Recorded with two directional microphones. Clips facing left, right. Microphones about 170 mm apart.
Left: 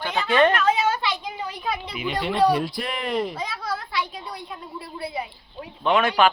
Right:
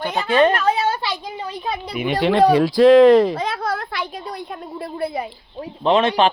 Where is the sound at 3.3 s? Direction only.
55° right (ahead or behind).